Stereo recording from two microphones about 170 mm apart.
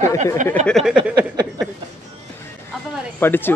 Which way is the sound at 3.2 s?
10° left (ahead or behind).